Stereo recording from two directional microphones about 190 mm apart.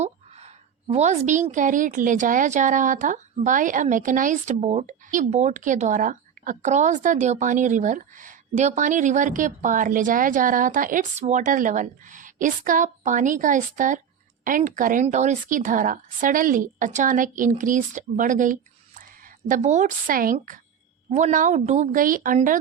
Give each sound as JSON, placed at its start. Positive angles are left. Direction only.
{"t": 0.0, "sound": "a woman's voice", "side_deg": -35}